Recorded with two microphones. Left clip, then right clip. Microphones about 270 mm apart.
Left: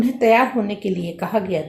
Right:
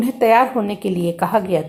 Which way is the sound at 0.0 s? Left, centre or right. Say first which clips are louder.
Right 2 dB; right.